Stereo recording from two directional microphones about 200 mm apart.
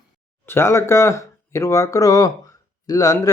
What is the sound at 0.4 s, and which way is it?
Speech, 10° left (ahead or behind).